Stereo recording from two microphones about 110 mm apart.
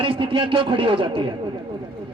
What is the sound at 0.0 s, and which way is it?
Speech, 55° right (ahead or behind).